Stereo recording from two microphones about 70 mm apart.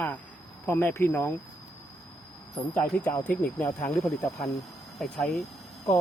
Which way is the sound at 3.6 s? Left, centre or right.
Left.